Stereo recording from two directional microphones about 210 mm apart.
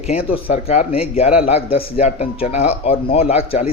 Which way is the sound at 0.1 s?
25° left (ahead or behind).